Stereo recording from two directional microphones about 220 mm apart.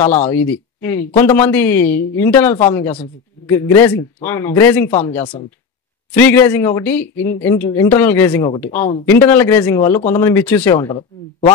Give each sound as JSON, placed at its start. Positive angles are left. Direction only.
{"t": 0.2, "sound": "speech", "side_deg": 10}
{"t": 5.2, "sound": "speech", "side_deg": 20}
{"t": 6.1, "sound": "speech", "side_deg": 10}